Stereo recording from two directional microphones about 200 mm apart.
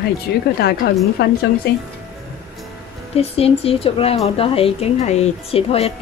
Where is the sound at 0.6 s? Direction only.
55° left (ahead or behind).